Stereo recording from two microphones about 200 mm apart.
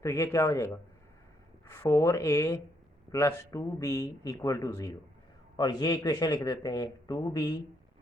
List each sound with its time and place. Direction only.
0.0 s a man's voice: 15° left (ahead or behind)